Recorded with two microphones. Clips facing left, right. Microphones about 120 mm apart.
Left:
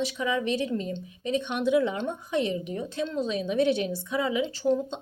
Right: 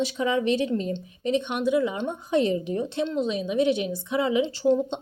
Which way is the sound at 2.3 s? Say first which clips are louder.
Right 6 dB; 35° right (ahead or behind).